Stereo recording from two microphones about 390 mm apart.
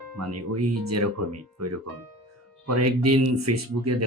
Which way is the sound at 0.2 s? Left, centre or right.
Right.